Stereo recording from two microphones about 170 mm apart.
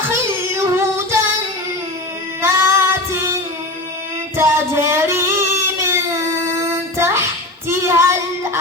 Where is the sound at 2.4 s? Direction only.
15° right (ahead or behind).